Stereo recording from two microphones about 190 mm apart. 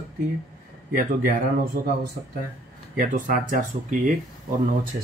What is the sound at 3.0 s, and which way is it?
Speech, 45° right (ahead or behind).